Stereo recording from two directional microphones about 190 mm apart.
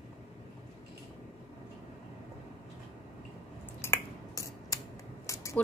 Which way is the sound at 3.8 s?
15° left (ahead or behind).